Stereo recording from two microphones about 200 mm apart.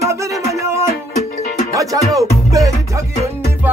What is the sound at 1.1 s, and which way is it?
Music, 35° left (ahead or behind).